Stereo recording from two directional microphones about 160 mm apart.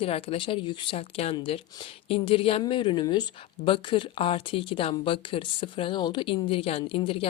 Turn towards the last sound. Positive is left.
turn(degrees=35)  # may be behind; listen again after turning